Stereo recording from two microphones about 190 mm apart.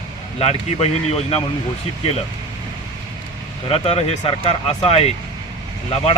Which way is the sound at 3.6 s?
30° left (ahead or behind).